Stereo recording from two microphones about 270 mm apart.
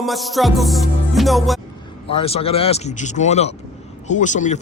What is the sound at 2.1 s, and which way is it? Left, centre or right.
Speech, left.